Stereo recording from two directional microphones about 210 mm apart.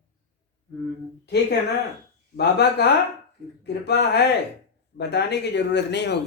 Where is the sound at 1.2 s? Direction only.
50° left (ahead or behind).